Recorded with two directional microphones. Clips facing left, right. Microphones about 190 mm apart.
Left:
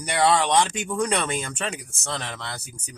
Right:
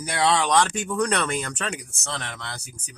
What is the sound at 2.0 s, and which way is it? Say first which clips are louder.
Speech: left 3 dB; centre (ahead or behind).